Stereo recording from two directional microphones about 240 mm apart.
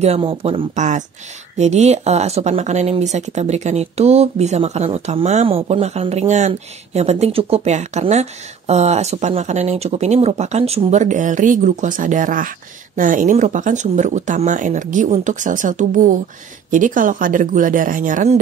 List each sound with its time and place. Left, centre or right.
0.0 s speech: right